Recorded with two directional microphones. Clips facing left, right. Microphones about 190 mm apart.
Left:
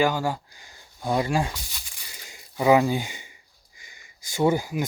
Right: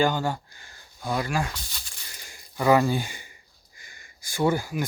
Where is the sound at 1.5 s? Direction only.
10° left (ahead or behind).